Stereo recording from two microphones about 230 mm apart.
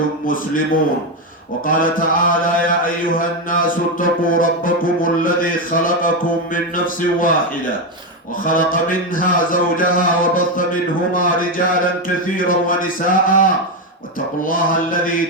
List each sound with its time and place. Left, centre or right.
1.6 s a man's voice: left
8.4 s a man's voice: left
14.4 s a man's voice: left